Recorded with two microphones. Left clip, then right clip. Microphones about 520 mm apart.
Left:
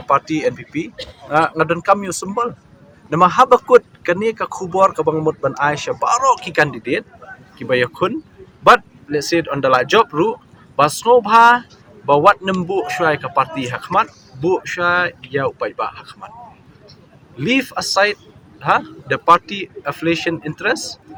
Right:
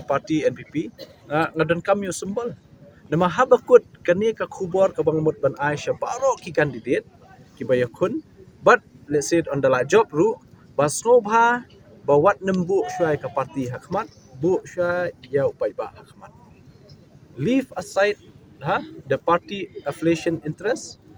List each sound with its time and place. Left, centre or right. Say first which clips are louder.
0.1 s speech: left 5 dB; right
17.3 s speech: left 5 dB; right